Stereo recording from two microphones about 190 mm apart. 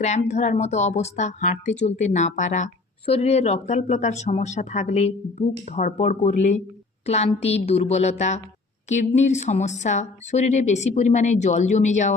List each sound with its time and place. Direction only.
0.0 s speech: 35° left (ahead or behind)